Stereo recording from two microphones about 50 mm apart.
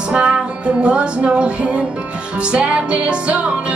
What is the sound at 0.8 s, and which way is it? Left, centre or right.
Music, right.